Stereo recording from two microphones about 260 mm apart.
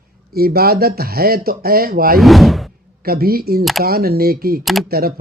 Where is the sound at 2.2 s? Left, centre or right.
Centre.